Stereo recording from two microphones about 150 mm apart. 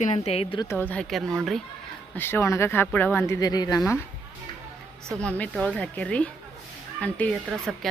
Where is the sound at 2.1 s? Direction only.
15° left (ahead or behind).